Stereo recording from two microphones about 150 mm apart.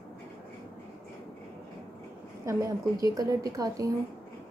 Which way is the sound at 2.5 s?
20° right (ahead or behind).